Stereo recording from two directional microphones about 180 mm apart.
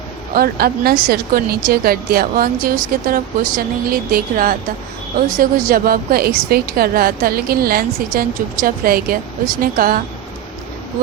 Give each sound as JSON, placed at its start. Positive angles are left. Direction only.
{"t": 0.3, "sound": "a woman's voice", "side_deg": -55}